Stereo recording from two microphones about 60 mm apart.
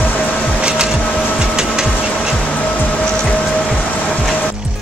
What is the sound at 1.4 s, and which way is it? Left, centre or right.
Music, centre.